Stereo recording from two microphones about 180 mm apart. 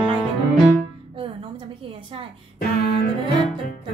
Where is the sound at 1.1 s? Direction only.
30° right (ahead or behind).